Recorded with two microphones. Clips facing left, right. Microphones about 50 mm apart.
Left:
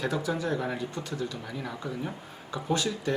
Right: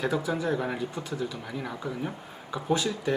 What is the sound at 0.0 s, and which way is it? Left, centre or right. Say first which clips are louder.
Speech: right 2 dB; centre.